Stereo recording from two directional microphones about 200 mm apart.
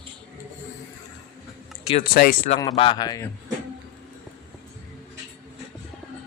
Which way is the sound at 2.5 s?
20° left (ahead or behind).